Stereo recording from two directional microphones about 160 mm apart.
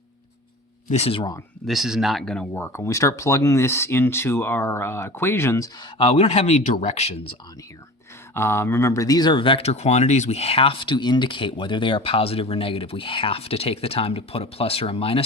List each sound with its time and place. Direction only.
0.9 s speech: 40° left (ahead or behind)
1.6 s speech: centre (ahead or behind); by 7.3 s 40° left (ahead or behind)
8.3 s speech: 15° left (ahead or behind); by 15.2 s 35° left (ahead or behind)